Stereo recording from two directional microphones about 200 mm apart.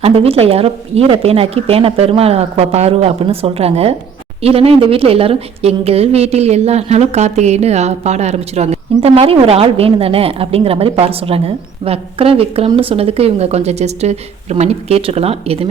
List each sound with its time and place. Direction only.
0.0 s a woman's voice: 30° right (ahead or behind)